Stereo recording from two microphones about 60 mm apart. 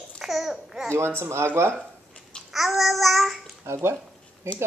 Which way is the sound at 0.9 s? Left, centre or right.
Right.